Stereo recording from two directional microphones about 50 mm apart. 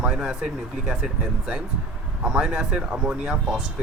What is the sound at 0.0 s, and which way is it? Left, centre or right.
Speech, centre.